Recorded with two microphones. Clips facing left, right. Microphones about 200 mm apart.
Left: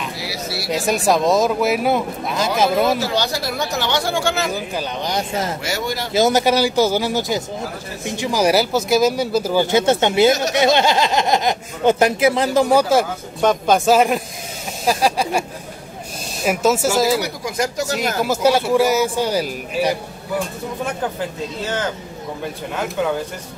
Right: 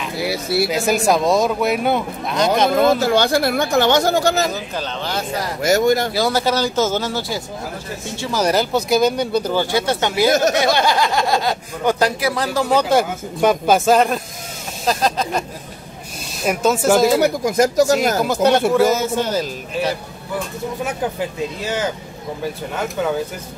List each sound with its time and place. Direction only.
0.2 s speech: 55° right (ahead or behind)
0.7 s speech: centre (ahead or behind)
3.0 s speech: 55° right (ahead or behind)
4.5 s speech: 10° left (ahead or behind)
5.6 s speech: 45° right (ahead or behind)
6.1 s speech: 20° left (ahead or behind)
9.7 s speech: 20° left (ahead or behind)
13.4 s speech: 5° right (ahead or behind); by 15.4 s 10° left (ahead or behind)
16.4 s speech: 5° left (ahead or behind)
17.2 s speech: 45° right (ahead or behind)
18.2 s speech: 5° left (ahead or behind)